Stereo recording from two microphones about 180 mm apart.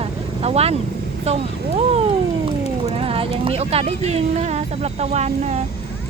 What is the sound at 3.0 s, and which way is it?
Speech, 30° right (ahead or behind).